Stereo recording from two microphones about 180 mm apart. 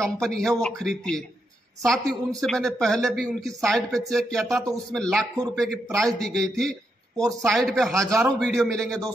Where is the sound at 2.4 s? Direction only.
5° left (ahead or behind).